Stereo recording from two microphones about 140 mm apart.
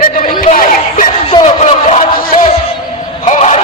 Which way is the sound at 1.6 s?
60° left (ahead or behind).